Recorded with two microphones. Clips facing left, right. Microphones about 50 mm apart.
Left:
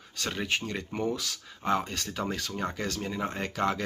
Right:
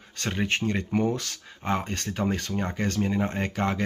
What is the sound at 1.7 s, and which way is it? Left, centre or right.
Speech, right.